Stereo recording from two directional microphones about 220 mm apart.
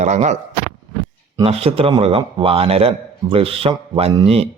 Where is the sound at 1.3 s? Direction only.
25° right (ahead or behind).